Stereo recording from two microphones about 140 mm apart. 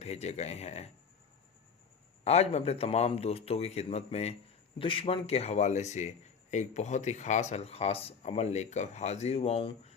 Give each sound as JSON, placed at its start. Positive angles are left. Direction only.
{"t": 0.0, "sound": "a man's voice", "side_deg": 50}
{"t": 2.2, "sound": "a man's voice", "side_deg": 50}
{"t": 4.8, "sound": "a man's voice", "side_deg": 40}